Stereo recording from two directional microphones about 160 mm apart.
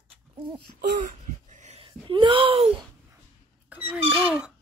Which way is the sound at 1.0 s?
50° right (ahead or behind).